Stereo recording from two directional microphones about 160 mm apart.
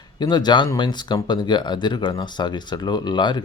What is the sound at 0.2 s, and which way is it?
Speech, 25° left (ahead or behind).